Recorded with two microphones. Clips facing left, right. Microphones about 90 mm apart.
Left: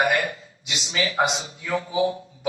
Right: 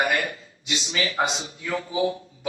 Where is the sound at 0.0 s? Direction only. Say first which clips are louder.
Left 2 dB; 20° left (ahead or behind).